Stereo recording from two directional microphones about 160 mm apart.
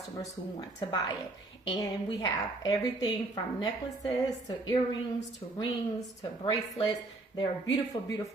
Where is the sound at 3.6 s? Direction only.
25° left (ahead or behind).